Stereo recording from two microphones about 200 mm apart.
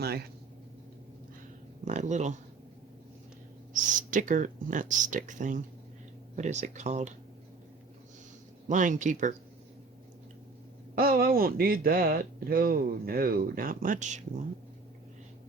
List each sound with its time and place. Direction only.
1.8 s speech: 35° right (ahead or behind)
3.7 s speech: 40° right (ahead or behind)
8.6 s speech: 40° right (ahead or behind)
10.9 s speech: 50° right (ahead or behind)